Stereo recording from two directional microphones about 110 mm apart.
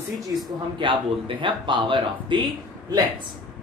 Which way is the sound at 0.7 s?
50° right (ahead or behind).